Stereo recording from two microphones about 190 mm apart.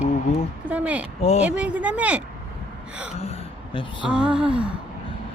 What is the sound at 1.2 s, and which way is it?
Speech, 35° left (ahead or behind).